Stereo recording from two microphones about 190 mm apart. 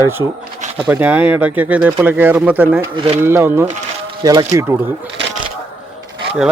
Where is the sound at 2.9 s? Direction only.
30° right (ahead or behind).